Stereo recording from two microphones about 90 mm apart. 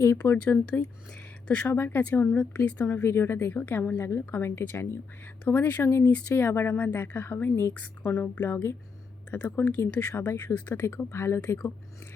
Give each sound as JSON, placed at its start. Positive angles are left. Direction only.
{"t": 0.4, "sound": "speech", "side_deg": 15}
{"t": 3.0, "sound": "speech", "side_deg": 30}